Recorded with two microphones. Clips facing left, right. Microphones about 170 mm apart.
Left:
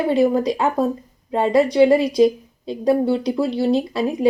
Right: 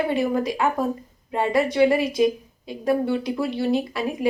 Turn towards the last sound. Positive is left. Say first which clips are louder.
# left 4 dB
turn(degrees=25)  # may be behind; listen again after turning